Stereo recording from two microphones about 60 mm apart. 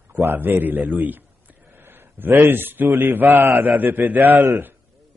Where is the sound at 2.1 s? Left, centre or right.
Right.